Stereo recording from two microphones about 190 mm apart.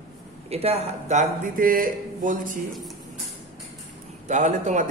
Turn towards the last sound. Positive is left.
turn(degrees=-40)  # may be behind; listen again after turning